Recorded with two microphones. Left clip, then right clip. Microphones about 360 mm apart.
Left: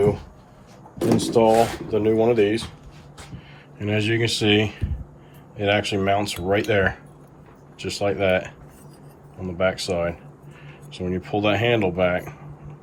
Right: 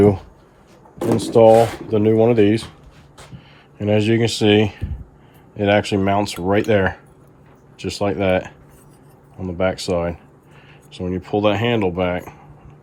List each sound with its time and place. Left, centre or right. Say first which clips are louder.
1.2 s speech: right 7 dB; right
3.3 s speech: right 3 dB; centre
9.6 s speech: right 2 dB; centre